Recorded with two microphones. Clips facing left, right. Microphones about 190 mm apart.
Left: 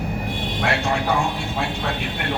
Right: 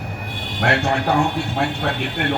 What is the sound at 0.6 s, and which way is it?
Speech, 65° right (ahead or behind).